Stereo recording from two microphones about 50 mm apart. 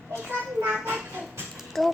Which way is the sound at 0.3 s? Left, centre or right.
Right.